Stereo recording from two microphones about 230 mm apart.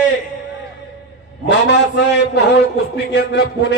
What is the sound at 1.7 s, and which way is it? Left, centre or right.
Music, left.